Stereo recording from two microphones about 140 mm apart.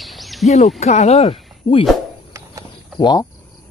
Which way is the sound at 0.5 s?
55° left (ahead or behind).